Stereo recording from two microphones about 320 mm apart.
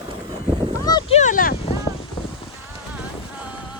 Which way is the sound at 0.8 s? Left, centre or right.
Centre.